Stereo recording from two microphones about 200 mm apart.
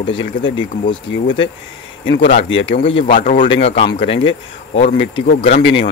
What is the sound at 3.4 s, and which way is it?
Speech, 30° left (ahead or behind).